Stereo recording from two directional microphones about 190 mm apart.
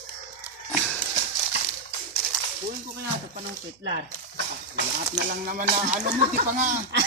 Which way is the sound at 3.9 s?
65° right (ahead or behind).